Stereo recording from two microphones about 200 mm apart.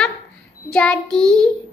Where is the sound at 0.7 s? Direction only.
5° left (ahead or behind).